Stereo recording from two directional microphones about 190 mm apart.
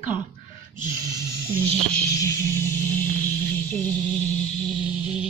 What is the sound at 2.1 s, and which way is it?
Speech, 15° left (ahead or behind).